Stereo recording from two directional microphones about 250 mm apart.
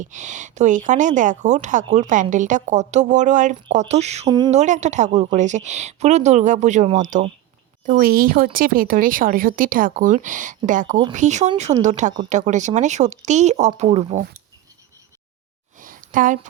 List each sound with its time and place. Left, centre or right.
0.0 s speech: right
4.6 s speech: right
15.8 s a sound: right